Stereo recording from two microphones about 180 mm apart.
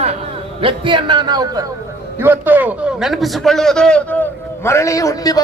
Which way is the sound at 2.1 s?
10° right (ahead or behind).